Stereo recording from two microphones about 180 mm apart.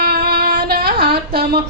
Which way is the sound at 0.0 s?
60° right (ahead or behind).